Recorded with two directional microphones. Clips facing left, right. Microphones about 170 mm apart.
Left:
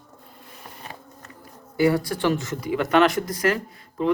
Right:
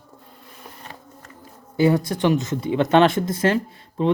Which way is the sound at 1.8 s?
20° right (ahead or behind).